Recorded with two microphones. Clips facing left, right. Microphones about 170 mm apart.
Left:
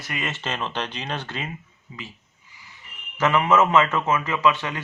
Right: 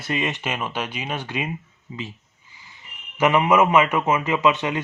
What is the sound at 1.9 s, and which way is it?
Speech, 25° right (ahead or behind).